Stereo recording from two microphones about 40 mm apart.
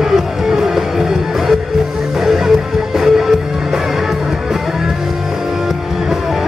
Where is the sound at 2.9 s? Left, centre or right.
Centre.